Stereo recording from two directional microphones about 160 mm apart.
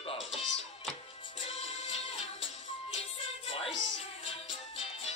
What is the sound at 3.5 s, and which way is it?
Music, 35° left (ahead or behind).